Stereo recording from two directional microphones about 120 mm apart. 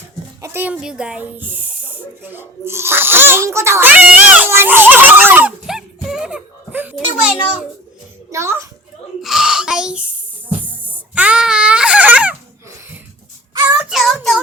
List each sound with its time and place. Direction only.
0.4 s speech: 15° right (ahead or behind)
5.6 s music: 5° right (ahead or behind)
6.9 s a child's voice: 5° right (ahead or behind)
8.3 s a child's voice: 25° right (ahead or behind)
9.2 s a sound: 5° right (ahead or behind)
13.9 s child singing: centre (ahead or behind)